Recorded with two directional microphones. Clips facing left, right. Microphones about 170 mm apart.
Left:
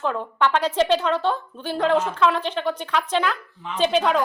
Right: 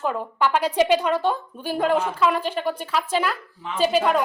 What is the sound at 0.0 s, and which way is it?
A woman's voice, 5° right (ahead or behind).